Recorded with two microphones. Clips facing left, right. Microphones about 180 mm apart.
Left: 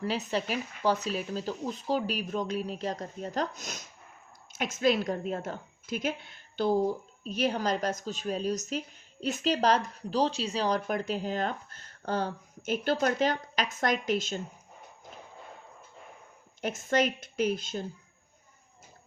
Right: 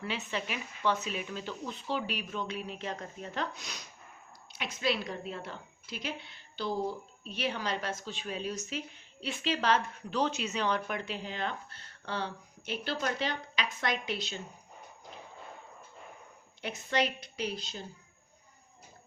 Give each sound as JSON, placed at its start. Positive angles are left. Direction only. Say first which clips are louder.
{"t": 0.0, "sound": "speech", "louder": "left 6 dB", "side_deg": 40}
{"t": 16.6, "sound": "speech", "louder": "left 4 dB", "side_deg": 45}